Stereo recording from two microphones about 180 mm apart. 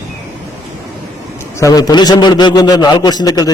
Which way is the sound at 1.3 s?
15° left (ahead or behind).